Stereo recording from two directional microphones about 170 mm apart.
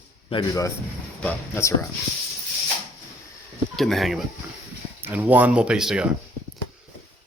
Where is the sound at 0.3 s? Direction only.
35° left (ahead or behind).